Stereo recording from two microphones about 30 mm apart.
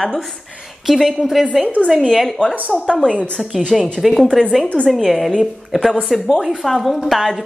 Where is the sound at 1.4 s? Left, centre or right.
Centre.